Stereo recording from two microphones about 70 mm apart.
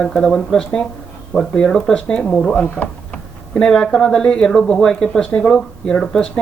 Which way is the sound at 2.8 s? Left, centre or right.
Left.